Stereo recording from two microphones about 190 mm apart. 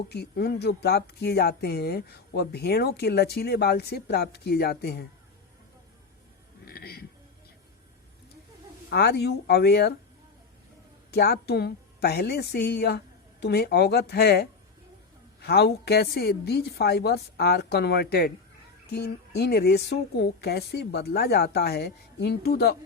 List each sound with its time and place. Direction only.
0.1 s speech: 60° left (ahead or behind)
6.7 s music: 55° left (ahead or behind)
8.9 s speech: 60° left (ahead or behind)
11.1 s speech: 55° left (ahead or behind)